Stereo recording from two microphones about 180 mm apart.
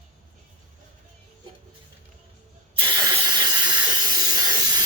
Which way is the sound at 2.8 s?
25° right (ahead or behind).